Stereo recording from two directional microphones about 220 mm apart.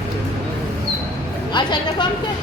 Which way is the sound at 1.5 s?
20° left (ahead or behind).